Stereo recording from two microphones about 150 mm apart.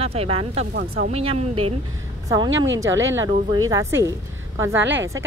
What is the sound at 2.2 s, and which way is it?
Speech, 25° right (ahead or behind).